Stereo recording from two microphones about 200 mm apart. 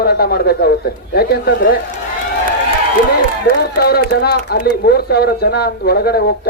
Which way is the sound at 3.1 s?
50° left (ahead or behind).